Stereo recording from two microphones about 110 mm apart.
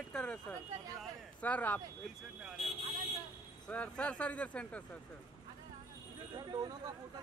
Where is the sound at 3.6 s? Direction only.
10° left (ahead or behind).